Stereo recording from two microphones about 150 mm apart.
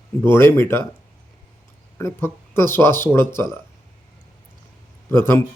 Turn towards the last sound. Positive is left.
turn(degrees=15)  # may be behind; listen again after turning